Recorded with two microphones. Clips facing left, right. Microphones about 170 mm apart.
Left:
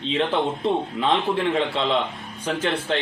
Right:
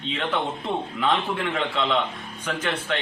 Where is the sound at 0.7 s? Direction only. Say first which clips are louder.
Right 1 dB; 25° left (ahead or behind).